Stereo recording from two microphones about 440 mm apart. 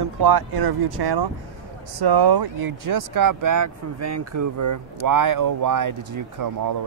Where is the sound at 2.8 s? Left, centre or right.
Right.